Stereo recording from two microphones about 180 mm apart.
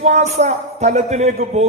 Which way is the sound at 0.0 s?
40° right (ahead or behind).